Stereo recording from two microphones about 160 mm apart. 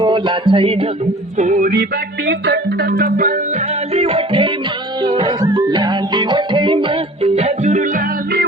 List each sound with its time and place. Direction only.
0.0 s music: 30° right (ahead or behind)
1.4 s music: 55° right (ahead or behind)
3.9 s music: 35° right (ahead or behind)